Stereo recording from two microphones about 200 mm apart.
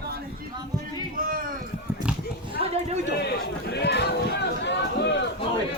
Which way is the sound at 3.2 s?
55° left (ahead or behind).